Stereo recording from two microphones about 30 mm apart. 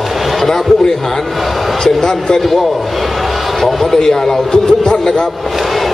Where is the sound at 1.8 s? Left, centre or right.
Left.